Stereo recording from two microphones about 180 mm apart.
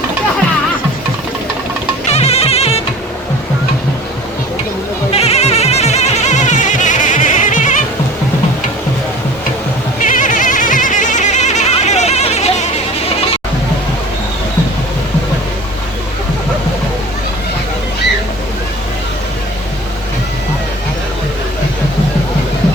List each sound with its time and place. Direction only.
2.1 s music: 35° left (ahead or behind)
5.1 s a sound: 35° left (ahead or behind)
10.0 s goat: 45° left (ahead or behind)